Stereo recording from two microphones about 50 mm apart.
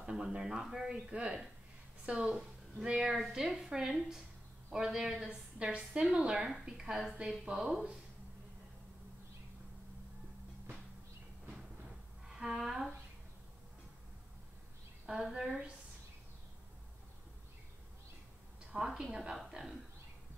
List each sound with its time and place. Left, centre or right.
0.0 s speech: centre
0.8 s a woman's voice: right
7.5 s a woman's voice: right
12.3 s speech: centre
15.0 s speech: centre
18.8 s a woman's voice: centre